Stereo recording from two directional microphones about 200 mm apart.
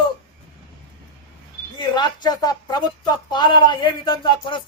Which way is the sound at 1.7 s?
20° left (ahead or behind).